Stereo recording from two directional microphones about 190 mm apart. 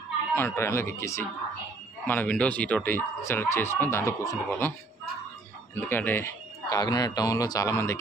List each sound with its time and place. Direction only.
0.4 s speech: 15° left (ahead or behind)
5.9 s speech: 10° left (ahead or behind)